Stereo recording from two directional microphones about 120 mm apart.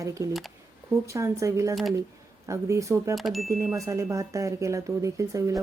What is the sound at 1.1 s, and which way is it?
Speech, 25° right (ahead or behind).